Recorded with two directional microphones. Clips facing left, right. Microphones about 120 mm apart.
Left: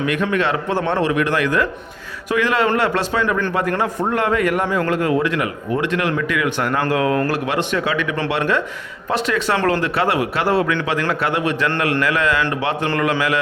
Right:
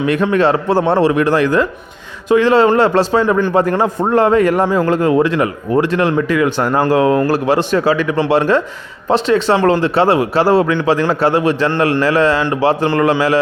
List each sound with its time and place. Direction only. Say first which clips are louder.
0.0 s a man's voice: right 6 dB; 35° right (ahead or behind)